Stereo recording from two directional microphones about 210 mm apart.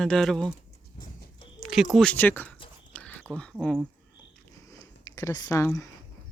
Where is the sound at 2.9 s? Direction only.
5° left (ahead or behind).